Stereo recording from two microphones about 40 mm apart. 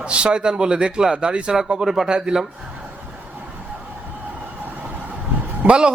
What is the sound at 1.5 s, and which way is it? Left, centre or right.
Speech, centre.